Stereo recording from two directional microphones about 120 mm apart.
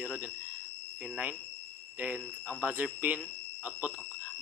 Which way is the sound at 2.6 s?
10° right (ahead or behind).